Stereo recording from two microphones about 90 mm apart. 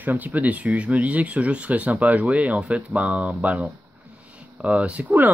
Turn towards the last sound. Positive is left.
turn(degrees=-20)  # may be behind; listen again after turning